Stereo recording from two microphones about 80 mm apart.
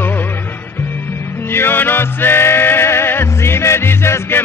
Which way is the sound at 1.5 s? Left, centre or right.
Left.